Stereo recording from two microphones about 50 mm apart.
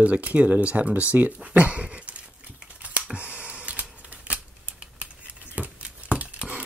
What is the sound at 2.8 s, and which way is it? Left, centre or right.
Computer keyboard, right.